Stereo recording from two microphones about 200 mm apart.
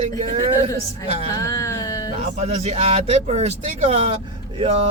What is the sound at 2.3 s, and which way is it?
Speech, 35° right (ahead or behind).